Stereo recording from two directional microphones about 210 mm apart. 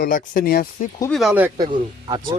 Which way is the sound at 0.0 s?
40° left (ahead or behind).